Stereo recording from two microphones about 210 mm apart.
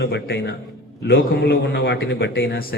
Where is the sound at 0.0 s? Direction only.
55° left (ahead or behind).